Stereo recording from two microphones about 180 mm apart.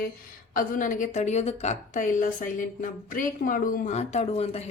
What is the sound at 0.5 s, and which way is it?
A woman's voice, 50° left (ahead or behind).